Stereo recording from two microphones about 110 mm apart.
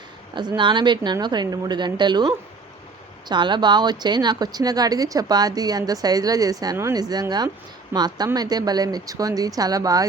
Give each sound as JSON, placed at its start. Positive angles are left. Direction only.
{"t": 0.3, "sound": "speech", "side_deg": -45}